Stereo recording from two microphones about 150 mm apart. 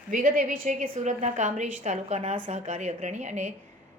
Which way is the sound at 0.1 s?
60° right (ahead or behind).